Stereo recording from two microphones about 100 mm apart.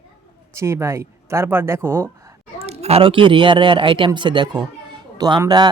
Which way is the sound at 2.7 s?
90° right.